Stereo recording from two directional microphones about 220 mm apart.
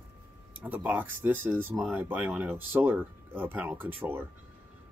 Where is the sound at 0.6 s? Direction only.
5° right (ahead or behind).